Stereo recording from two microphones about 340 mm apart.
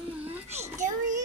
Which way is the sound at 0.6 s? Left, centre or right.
Right.